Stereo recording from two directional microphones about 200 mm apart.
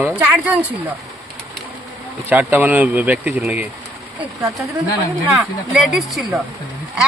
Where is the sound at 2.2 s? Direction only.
10° right (ahead or behind).